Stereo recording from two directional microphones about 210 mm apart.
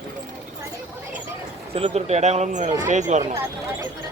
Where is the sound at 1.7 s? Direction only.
30° right (ahead or behind).